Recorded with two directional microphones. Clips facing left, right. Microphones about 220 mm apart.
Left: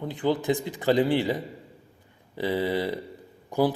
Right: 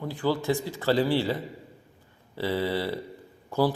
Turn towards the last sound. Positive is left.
turn(degrees=15)  # may be behind; listen again after turning